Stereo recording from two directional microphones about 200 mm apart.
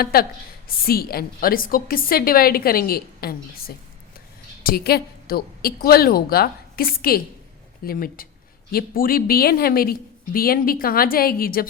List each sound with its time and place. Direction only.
0.0 s a woman's voice: 50° left (ahead or behind)
4.6 s a woman's voice: 50° left (ahead or behind)